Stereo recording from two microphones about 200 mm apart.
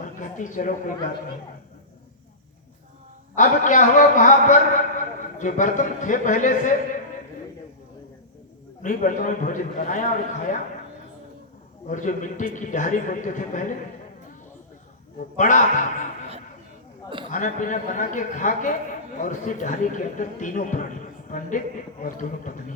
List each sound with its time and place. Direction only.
0.0 s a sound: 40° left (ahead or behind)
3.3 s a man's voice: 40° left (ahead or behind)
8.8 s a man's voice: 40° left (ahead or behind)
11.9 s a man's voice: 40° left (ahead or behind)
15.4 s a man's voice: 40° left (ahead or behind)
17.3 s a man's voice: 40° left (ahead or behind)
21.2 s a sound: 40° left (ahead or behind)
22.0 s a man's voice: 40° left (ahead or behind)